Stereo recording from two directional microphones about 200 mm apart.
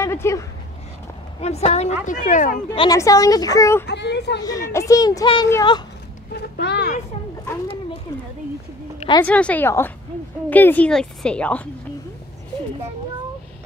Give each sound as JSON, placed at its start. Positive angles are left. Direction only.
{"t": 0.0, "sound": "dog", "side_deg": 15}
{"t": 1.4, "sound": "a woman's voice", "side_deg": 30}
{"t": 2.7, "sound": "speech", "side_deg": 20}
{"t": 3.8, "sound": "speech", "side_deg": 60}
{"t": 4.4, "sound": "speech", "side_deg": 15}
{"t": 6.3, "sound": "speech", "side_deg": 55}
{"t": 9.2, "sound": "speech", "side_deg": 5}